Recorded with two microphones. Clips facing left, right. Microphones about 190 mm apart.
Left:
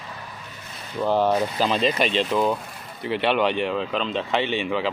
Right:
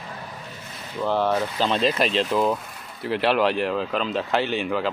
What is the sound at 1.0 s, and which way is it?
Speech, 15° left (ahead or behind).